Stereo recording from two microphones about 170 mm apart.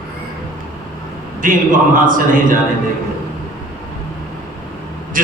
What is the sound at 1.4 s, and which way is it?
A man's voice, 50° right (ahead or behind).